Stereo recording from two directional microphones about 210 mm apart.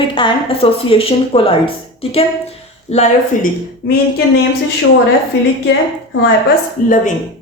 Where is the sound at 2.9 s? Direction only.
30° left (ahead or behind).